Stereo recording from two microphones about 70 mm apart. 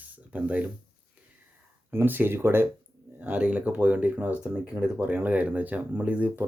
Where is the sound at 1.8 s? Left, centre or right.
Right.